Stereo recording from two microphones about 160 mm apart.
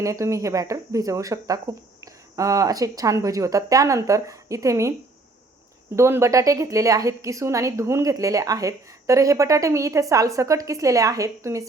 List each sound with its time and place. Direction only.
0.0 s a woman's voice: 20° right (ahead or behind)
6.0 s a woman's voice: 15° right (ahead or behind)